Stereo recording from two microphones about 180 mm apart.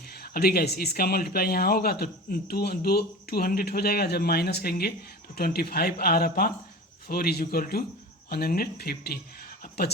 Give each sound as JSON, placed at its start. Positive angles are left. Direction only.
{"t": 0.1, "sound": "speech", "side_deg": 60}